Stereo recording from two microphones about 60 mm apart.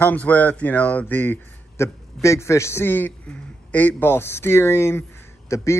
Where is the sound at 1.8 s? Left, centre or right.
Left.